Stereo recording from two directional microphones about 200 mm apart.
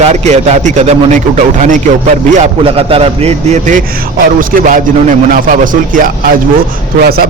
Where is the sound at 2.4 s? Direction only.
30° right (ahead or behind).